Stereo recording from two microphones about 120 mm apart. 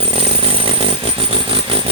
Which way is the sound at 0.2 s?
50° right (ahead or behind).